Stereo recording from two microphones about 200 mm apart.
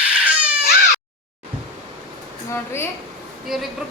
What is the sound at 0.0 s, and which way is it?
Baby cry, 5° right (ahead or behind).